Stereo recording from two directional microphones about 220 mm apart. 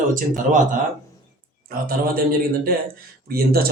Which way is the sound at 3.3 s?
45° right (ahead or behind).